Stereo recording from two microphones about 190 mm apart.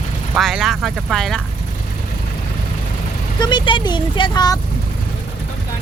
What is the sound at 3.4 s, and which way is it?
Speech, 25° left (ahead or behind).